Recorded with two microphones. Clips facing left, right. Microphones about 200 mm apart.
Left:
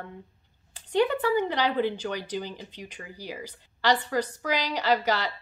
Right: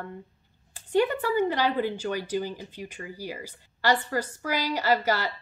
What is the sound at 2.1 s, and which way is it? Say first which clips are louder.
Speech: right 4 dB; 10° right (ahead or behind).